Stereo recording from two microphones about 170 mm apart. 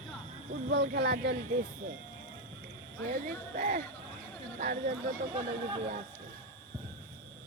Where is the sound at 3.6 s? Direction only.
50° right (ahead or behind).